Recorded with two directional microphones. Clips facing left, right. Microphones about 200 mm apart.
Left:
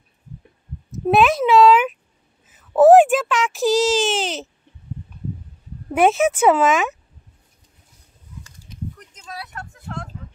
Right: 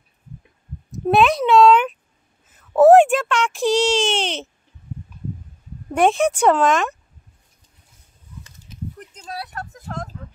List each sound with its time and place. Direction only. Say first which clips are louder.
0.9 s a child's voice: even; centre (ahead or behind)
5.9 s a child's voice: left 1 dB; 5° left (ahead or behind)
9.1 s a sound: right 3 dB; 35° right (ahead or behind)